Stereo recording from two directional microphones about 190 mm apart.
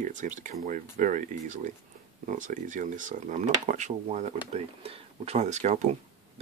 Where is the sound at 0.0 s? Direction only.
40° right (ahead or behind).